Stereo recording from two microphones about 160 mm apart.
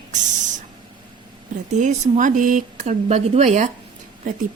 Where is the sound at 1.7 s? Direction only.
50° right (ahead or behind).